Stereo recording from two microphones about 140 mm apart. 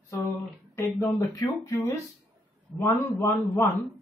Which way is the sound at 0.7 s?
20° left (ahead or behind).